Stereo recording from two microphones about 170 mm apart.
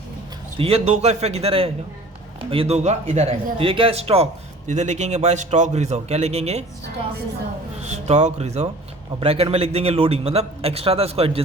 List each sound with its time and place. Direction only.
0.6 s speech: 40° right (ahead or behind)
7.8 s speech: 40° right (ahead or behind)